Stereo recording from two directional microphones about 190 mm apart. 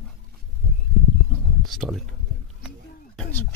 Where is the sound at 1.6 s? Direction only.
Centre (ahead or behind).